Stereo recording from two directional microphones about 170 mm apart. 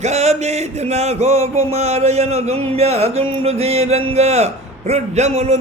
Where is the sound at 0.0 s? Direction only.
40° right (ahead or behind).